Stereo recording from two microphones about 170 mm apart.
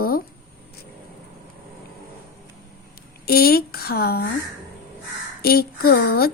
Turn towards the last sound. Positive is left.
turn(degrees=65)  # may be behind; listen again after turning